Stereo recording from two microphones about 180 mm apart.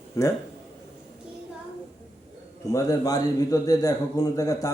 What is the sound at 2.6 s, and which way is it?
A man's voice, 20° left (ahead or behind).